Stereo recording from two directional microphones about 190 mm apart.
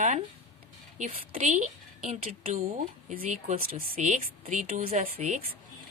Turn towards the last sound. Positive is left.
turn(degrees=-40)  # may be behind; listen again after turning